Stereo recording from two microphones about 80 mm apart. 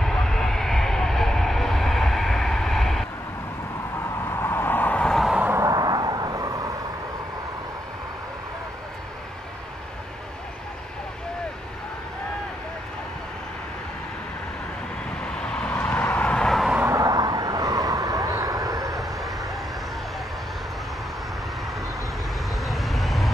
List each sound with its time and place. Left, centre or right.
0.0 s a sound: centre
4.3 s a sound: left
5.7 s vehicle: right
15.3 s vehicle: centre
16.8 s vehicle: right
22.6 s vehicle: centre